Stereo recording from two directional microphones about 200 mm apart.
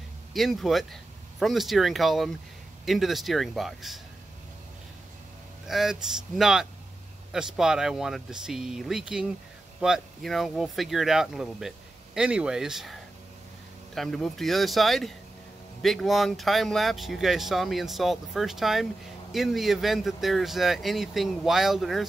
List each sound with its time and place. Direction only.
0.3 s speech: centre (ahead or behind)
5.7 s speech: centre (ahead or behind)